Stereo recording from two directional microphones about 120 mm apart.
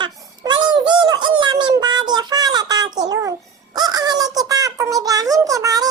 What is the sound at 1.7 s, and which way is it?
Child singing, 35° right (ahead or behind).